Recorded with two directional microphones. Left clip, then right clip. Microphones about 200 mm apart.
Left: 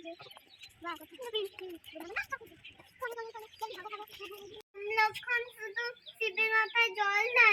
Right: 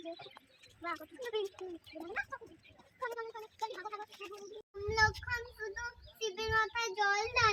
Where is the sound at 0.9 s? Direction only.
10° right (ahead or behind).